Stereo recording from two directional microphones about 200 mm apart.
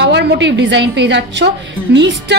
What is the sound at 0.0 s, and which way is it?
A woman's voice, 55° right (ahead or behind).